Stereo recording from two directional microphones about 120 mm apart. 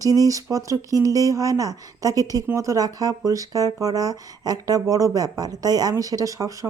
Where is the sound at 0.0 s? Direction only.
30° right (ahead or behind).